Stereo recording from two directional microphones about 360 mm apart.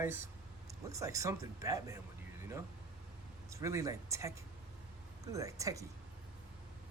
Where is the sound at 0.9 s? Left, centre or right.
Centre.